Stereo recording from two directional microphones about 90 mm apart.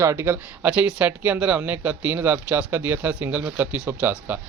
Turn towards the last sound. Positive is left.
turn(degrees=-20)  # may be behind; listen again after turning